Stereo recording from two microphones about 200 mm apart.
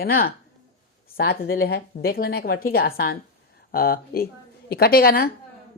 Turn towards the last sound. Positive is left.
turn(degrees=50)  # may be behind; listen again after turning